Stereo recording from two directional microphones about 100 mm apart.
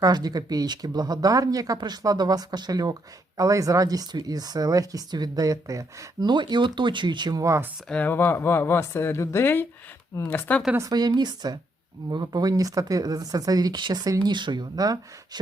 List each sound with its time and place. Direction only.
0.0 s speech: 40° right (ahead or behind)
6.2 s a woman's voice: 50° right (ahead or behind)
7.4 s speech: 25° right (ahead or behind)
7.9 s speech: 15° left (ahead or behind)
10.8 s a woman's voice: 40° right (ahead or behind)